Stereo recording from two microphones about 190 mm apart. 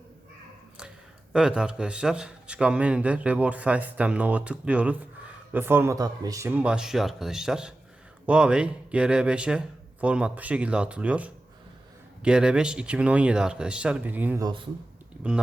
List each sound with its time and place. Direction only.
1.3 s a man's voice: 5° right (ahead or behind)
14.4 s speech: 25° right (ahead or behind)
15.2 s a man's voice: 5° right (ahead or behind)